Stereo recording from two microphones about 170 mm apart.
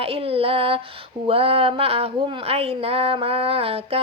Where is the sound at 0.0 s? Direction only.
35° right (ahead or behind).